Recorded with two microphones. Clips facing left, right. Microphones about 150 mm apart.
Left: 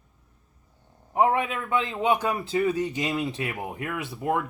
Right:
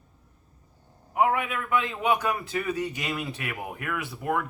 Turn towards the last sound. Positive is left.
turn(degrees=20)  # may be behind; listen again after turning